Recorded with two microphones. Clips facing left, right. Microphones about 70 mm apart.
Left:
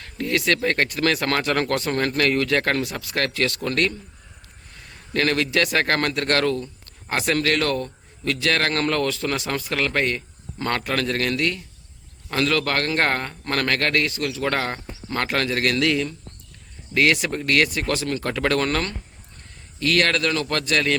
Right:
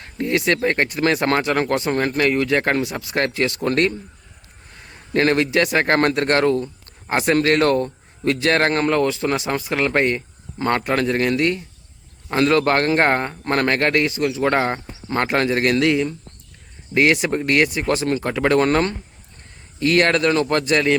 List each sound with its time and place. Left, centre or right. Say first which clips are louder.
0.0 s a man's voice: right 3 dB; right